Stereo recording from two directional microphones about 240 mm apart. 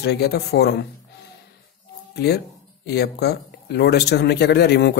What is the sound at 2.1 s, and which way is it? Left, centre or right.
Speech, left.